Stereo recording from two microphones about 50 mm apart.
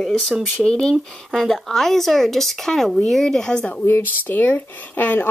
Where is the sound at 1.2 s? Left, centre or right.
Centre.